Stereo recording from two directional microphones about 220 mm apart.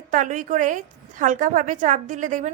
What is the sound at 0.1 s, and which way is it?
A woman's voice, 35° right (ahead or behind).